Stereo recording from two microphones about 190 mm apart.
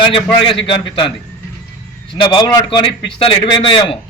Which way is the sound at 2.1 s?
25° left (ahead or behind).